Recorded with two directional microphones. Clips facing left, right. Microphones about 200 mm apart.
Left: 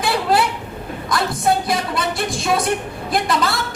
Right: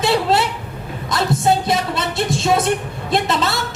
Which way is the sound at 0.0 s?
25° right (ahead or behind).